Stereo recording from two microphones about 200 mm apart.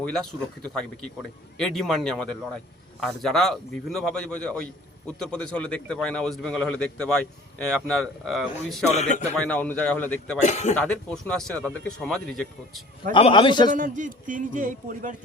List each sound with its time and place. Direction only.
0.0 s a man's voice: 5° left (ahead or behind)
8.9 s a man's voice: 35° left (ahead or behind)
9.3 s a man's voice: 5° left (ahead or behind)
10.4 s a man's voice: 35° left (ahead or behind)
10.8 s a man's voice: 5° left (ahead or behind)
13.1 s a man's voice: 25° left (ahead or behind)
13.7 s speech: 40° right (ahead or behind)